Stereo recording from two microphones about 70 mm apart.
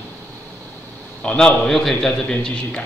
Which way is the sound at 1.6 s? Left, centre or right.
Centre.